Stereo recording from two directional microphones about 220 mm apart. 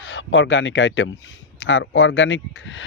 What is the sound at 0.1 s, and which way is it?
Speech, 60° left (ahead or behind).